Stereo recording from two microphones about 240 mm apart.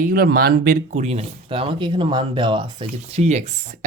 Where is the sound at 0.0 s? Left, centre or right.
Right.